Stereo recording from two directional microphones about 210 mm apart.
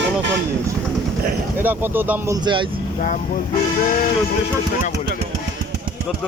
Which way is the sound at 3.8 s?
40° left (ahead or behind).